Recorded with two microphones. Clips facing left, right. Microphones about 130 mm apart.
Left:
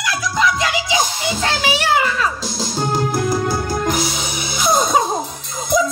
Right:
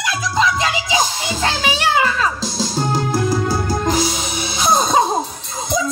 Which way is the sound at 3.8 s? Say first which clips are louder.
Right 2 dB; 30° right (ahead or behind).